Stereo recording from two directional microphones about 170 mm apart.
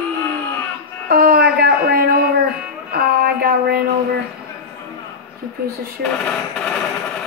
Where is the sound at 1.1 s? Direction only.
65° right (ahead or behind).